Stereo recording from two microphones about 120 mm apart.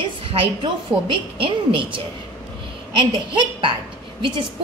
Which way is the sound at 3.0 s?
45° right (ahead or behind).